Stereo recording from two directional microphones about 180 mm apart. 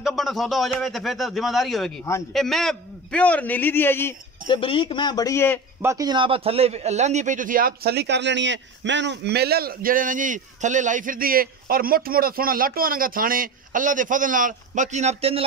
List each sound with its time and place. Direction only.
0.0 s a man's voice: centre (ahead or behind)
4.5 s speech: 30° left (ahead or behind)
5.8 s a man's voice: 15° right (ahead or behind); by 15.4 s 35° right (ahead or behind)